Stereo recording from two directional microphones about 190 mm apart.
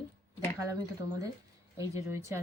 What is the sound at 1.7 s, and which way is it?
Speech, 15° right (ahead or behind).